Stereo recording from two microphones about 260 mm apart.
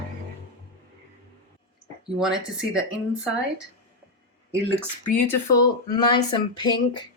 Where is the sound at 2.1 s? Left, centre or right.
Centre.